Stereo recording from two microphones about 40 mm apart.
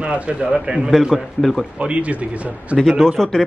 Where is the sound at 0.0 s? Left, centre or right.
Right.